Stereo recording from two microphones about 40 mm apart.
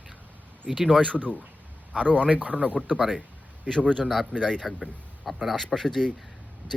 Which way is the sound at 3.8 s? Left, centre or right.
Centre.